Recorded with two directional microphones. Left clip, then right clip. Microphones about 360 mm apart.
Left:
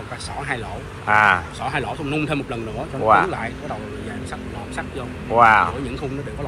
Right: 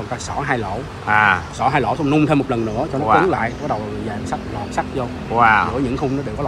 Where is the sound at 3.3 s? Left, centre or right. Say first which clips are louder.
Right 7 dB; right.